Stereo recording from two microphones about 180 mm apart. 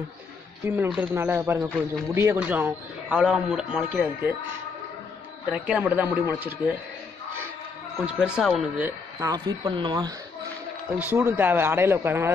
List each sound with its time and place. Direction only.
0.7 s a man's voice: 10° right (ahead or behind)
5.5 s a man's voice: 5° right (ahead or behind)
8.0 s speech: 5° right (ahead or behind)
9.3 s speech: 25° right (ahead or behind)
11.0 s a man's voice: 10° right (ahead or behind)